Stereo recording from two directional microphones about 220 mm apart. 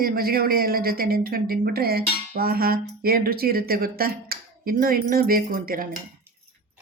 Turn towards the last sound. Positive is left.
turn(degrees=-40)  # may be behind; listen again after turning